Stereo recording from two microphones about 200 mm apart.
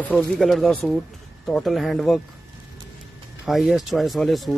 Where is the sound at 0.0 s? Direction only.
5° left (ahead or behind).